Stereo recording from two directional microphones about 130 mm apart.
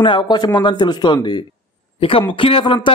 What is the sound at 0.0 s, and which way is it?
A man's voice, 35° left (ahead or behind).